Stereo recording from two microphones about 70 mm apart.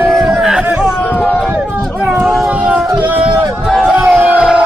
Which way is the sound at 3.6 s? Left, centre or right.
Centre.